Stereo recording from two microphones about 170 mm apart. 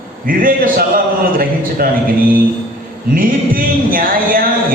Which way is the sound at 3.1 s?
55° right (ahead or behind).